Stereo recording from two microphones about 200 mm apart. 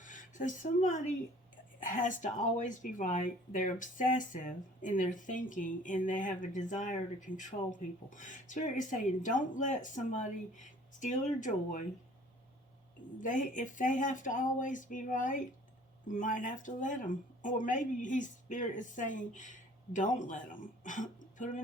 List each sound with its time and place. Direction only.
0.0 s speech: 40° left (ahead or behind)
13.2 s speech: 40° left (ahead or behind)